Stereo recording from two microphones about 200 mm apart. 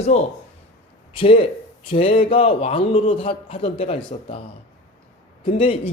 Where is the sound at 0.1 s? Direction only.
35° left (ahead or behind).